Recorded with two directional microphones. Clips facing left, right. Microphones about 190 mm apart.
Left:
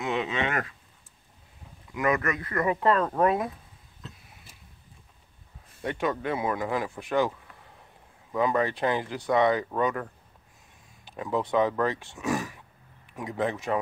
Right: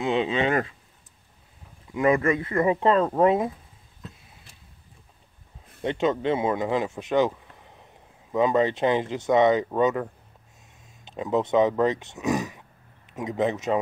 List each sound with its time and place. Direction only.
0.0 s speech: 30° right (ahead or behind)
2.0 s speech: 25° right (ahead or behind)
5.8 s speech: 25° right (ahead or behind)
11.1 s speech: 20° right (ahead or behind)